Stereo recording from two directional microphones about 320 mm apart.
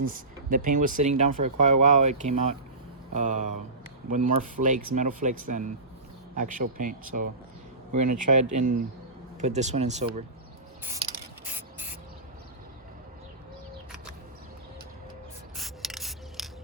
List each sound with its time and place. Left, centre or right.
0.1 s speech: right
10.9 s spray: centre
15.5 s music: centre